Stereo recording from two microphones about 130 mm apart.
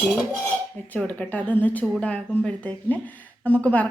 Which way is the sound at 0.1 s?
10° left (ahead or behind).